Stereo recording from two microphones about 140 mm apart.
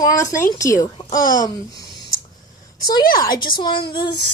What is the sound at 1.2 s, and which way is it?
Speech, 75° left (ahead or behind).